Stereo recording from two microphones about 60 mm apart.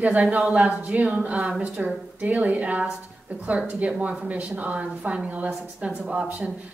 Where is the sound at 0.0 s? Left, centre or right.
Right.